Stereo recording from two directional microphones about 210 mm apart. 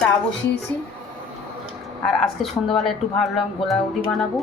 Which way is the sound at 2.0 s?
Centre (ahead or behind).